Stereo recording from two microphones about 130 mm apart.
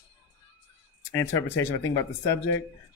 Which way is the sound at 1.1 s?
20° left (ahead or behind).